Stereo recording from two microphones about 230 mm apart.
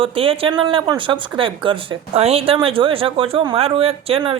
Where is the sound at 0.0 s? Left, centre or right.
Right.